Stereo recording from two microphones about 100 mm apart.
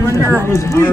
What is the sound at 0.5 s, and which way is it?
Speech, 25° left (ahead or behind).